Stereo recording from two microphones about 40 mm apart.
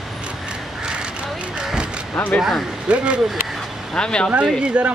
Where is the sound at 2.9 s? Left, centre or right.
Right.